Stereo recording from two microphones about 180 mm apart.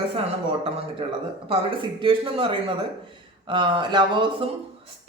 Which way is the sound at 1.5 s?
30° right (ahead or behind).